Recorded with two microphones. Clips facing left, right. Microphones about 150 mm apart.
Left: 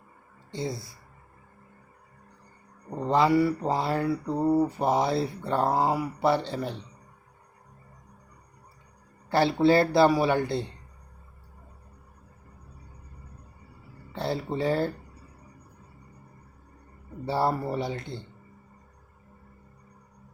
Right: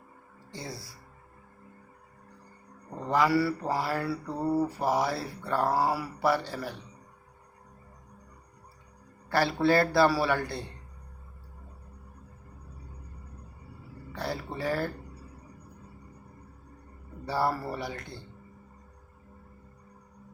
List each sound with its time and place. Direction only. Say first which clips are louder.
0.5 s mantra: left 8 dB; 20° left (ahead or behind)
3.1 s mantra: left 3 dB; 25° left (ahead or behind)
9.3 s mantra: left 3 dB; 20° left (ahead or behind)
14.1 s mantra: left 5 dB; 25° left (ahead or behind)
17.2 s mantra: left 3 dB; 25° left (ahead or behind)